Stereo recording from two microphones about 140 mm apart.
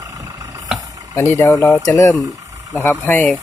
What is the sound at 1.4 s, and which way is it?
Speech, 20° left (ahead or behind).